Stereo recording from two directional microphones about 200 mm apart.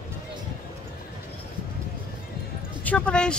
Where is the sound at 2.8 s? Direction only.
5° left (ahead or behind).